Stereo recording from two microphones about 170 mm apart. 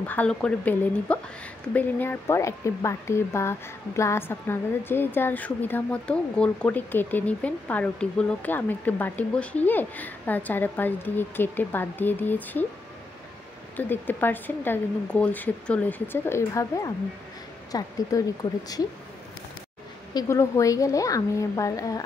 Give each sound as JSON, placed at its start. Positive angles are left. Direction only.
{"t": 0.0, "sound": "speech", "side_deg": 10}
{"t": 13.7, "sound": "speech", "side_deg": 10}
{"t": 20.2, "sound": "speech", "side_deg": 15}